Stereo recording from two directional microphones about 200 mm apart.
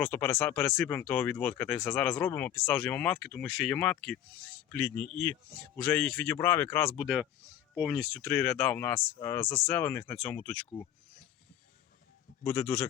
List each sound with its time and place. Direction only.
0.0 s speech: 10° left (ahead or behind)
6.9 s speech: centre (ahead or behind)
12.4 s speech: 10° left (ahead or behind)